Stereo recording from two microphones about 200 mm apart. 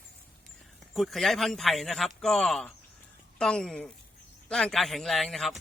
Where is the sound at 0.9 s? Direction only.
Centre (ahead or behind).